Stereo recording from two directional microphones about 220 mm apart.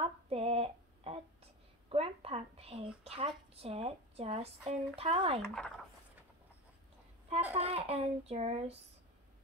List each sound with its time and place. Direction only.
0.0 s a sound: 25° right (ahead or behind)
1.9 s a woman's voice: 25° right (ahead or behind)
5.4 s speech: centre (ahead or behind)
7.5 s a woman's voice: 25° right (ahead or behind)